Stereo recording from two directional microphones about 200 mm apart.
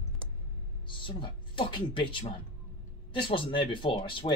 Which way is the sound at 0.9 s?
25° left (ahead or behind).